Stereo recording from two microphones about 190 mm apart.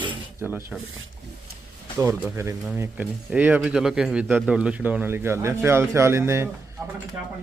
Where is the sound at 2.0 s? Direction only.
15° right (ahead or behind).